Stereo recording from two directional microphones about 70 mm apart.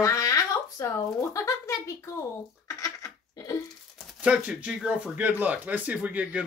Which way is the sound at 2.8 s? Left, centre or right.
Left.